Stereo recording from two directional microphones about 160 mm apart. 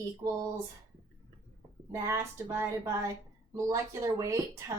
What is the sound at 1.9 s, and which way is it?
Speech, 20° right (ahead or behind).